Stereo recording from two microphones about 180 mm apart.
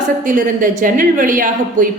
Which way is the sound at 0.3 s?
45° right (ahead or behind).